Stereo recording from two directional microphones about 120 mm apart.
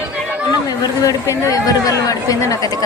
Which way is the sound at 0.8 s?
30° left (ahead or behind).